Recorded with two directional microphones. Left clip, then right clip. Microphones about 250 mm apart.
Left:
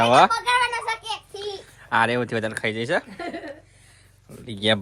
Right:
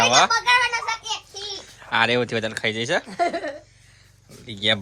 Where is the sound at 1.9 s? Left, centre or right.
Centre.